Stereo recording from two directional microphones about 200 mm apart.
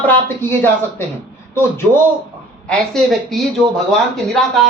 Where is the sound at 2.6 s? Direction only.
Centre (ahead or behind).